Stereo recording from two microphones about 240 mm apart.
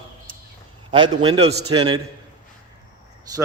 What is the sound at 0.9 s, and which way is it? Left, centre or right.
A man's voice, centre.